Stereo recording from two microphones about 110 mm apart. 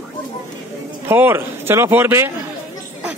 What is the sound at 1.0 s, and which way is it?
Speech, 20° right (ahead or behind).